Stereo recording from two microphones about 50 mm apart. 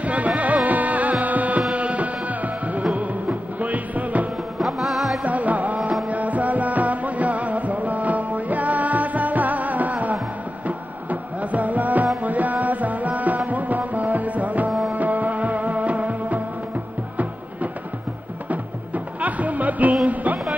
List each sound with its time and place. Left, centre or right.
0.0 s music: right
1.2 s carnatic music: right
1.7 s music: right
4.6 s music: centre
5.2 s music: right
19.2 s music: right